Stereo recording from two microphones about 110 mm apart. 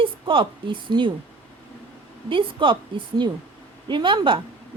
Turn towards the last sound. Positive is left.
turn(degrees=-50)  # may be behind; listen again after turning